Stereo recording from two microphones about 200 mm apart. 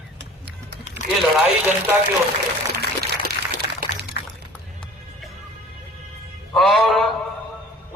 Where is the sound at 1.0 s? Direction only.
35° left (ahead or behind).